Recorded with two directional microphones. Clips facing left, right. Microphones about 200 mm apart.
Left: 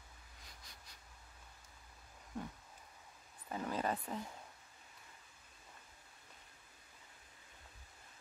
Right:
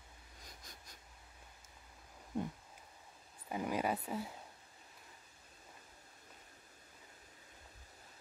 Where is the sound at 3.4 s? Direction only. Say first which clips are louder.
Right 2 dB; 10° right (ahead or behind).